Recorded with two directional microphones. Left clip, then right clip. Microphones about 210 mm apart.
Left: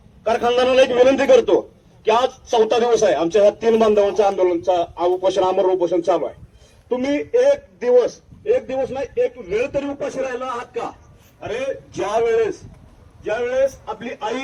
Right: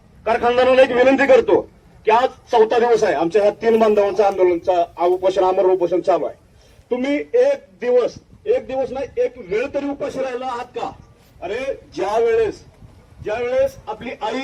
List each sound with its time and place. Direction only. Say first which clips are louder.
0.3 s a man's voice: right 2 dB; 60° left (ahead or behind); by 10.9 s 15° left (ahead or behind)
11.9 s a man's voice: right 1 dB; 15° left (ahead or behind)